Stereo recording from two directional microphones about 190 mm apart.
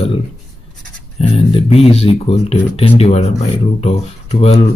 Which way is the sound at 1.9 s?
30° left (ahead or behind).